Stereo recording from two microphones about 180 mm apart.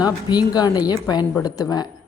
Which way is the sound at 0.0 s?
20° left (ahead or behind).